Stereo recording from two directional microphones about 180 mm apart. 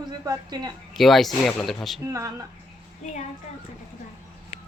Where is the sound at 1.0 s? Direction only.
Centre (ahead or behind).